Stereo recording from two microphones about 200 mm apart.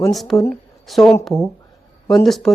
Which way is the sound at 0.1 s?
Centre (ahead or behind).